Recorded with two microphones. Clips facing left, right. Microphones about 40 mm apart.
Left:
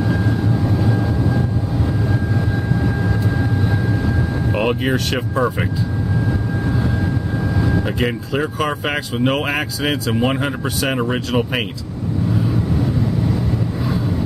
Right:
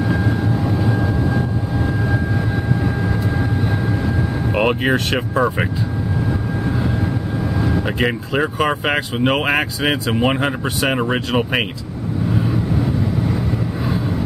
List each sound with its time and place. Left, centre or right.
0.0 s vehicle: centre
4.6 s speech: centre
7.6 s speech: centre
12.4 s vehicle: centre